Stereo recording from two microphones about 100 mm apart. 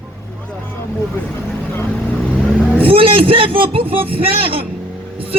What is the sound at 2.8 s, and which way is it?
A man's voice, 65° right (ahead or behind).